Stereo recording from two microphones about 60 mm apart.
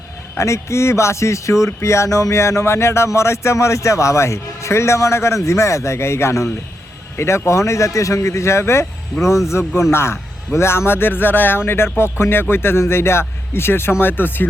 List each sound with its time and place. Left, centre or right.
0.3 s speech: left